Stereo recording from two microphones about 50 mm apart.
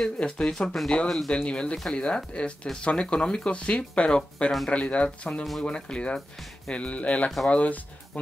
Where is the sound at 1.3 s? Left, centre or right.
Left.